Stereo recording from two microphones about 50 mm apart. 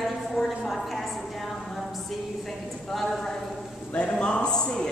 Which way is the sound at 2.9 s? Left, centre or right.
Centre.